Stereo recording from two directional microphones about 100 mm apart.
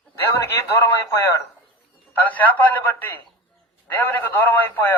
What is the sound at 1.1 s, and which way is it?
A man's voice, 25° left (ahead or behind).